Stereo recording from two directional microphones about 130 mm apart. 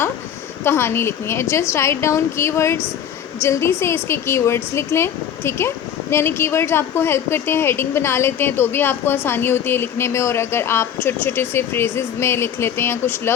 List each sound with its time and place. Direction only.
0.6 s speech: 20° left (ahead or behind)